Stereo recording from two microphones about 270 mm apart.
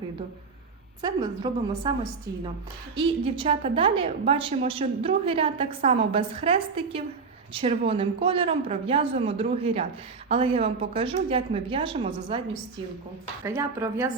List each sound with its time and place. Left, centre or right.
1.0 s a woman's voice: centre
2.9 s a woman's voice: centre
13.4 s a woman's voice: centre